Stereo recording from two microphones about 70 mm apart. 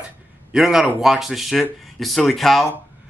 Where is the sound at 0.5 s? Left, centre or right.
Centre.